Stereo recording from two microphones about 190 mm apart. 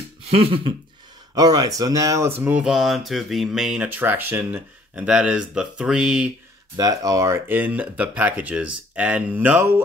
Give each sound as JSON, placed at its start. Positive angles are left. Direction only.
{"t": 0.3, "sound": "throat clearing", "side_deg": -30}
{"t": 1.3, "sound": "speech", "side_deg": -20}
{"t": 6.8, "sound": "speech", "side_deg": -20}